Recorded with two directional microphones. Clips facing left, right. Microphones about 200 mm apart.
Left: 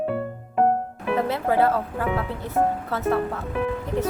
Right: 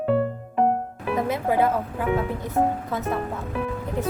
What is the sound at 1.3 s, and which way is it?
Speech, 15° right (ahead or behind).